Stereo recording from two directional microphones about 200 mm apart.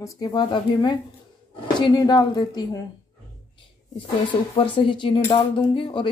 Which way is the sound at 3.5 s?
25° left (ahead or behind).